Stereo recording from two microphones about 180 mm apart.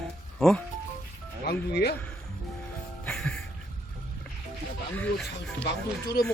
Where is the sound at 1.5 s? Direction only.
65° left (ahead or behind).